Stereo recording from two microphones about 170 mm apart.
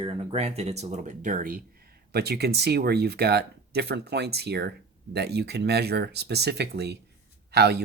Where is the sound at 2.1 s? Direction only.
65° right (ahead or behind).